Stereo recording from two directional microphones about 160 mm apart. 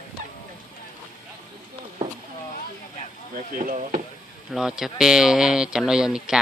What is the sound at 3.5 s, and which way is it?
Speech, 60° right (ahead or behind).